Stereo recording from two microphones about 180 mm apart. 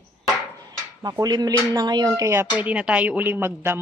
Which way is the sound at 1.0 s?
20° right (ahead or behind).